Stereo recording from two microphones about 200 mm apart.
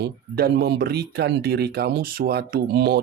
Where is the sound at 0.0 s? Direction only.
50° right (ahead or behind).